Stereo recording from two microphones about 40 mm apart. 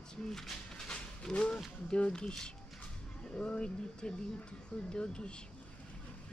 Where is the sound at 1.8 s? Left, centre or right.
Left.